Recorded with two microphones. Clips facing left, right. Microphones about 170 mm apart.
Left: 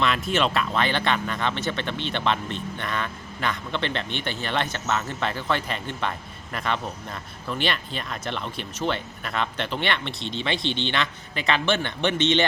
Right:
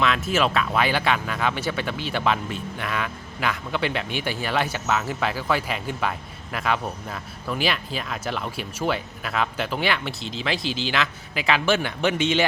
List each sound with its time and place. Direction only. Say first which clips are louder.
0.0 s speech: right 1 dB; centre (ahead or behind)